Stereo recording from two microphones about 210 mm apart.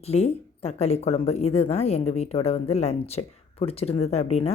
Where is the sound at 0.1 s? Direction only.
30° left (ahead or behind).